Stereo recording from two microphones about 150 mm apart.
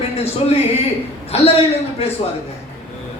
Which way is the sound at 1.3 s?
45° left (ahead or behind).